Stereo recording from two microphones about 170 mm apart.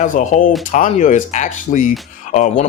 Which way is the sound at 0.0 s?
50° left (ahead or behind).